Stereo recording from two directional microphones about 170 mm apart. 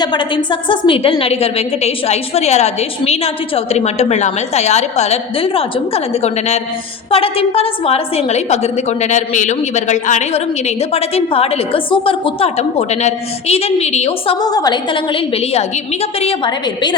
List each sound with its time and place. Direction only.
0.0 s a woman's voice: 25° left (ahead or behind)
14.4 s a woman's voice: 20° left (ahead or behind)